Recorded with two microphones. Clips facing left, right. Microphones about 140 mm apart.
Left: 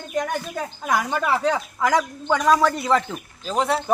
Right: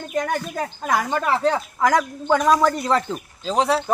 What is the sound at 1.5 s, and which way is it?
A man's voice, 5° left (ahead or behind).